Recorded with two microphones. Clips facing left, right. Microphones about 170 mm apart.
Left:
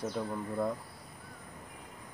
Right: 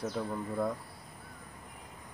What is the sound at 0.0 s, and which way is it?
Speech, centre (ahead or behind).